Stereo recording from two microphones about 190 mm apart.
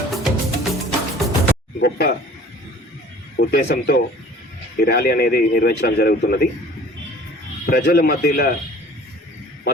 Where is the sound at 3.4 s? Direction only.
55° left (ahead or behind).